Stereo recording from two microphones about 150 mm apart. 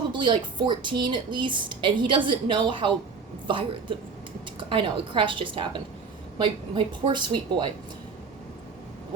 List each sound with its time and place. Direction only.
0.1 s a woman's voice: 30° right (ahead or behind)